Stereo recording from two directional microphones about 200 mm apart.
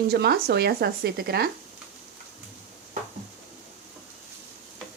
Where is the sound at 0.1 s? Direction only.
50° right (ahead or behind).